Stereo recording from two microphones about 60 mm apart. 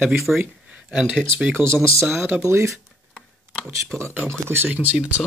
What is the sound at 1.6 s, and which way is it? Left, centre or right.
Speech, left.